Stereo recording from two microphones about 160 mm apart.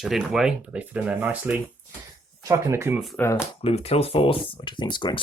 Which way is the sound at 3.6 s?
40° left (ahead or behind).